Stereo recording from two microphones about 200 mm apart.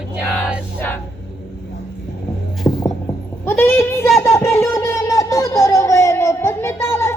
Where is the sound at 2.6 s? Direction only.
15° left (ahead or behind).